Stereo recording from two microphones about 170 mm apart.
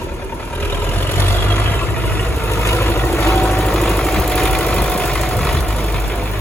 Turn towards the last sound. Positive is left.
turn(degrees=5)  # may be behind; listen again after turning